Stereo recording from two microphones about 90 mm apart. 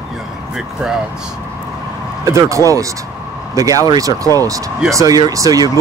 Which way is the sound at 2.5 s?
40° right (ahead or behind).